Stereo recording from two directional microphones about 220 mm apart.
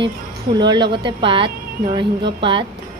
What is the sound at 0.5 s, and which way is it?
A woman's voice, 20° right (ahead or behind).